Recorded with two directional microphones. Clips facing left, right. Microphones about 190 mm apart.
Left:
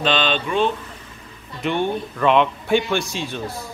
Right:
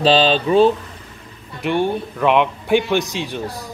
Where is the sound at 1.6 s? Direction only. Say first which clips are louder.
Right 3 dB; 10° right (ahead or behind).